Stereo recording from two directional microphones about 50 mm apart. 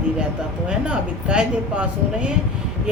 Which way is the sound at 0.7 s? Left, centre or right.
Right.